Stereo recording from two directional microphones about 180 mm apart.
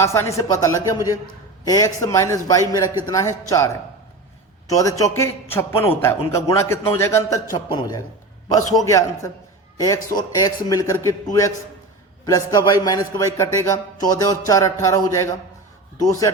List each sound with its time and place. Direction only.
0.0 s a man's voice: 15° left (ahead or behind)
4.7 s a man's voice: 20° left (ahead or behind)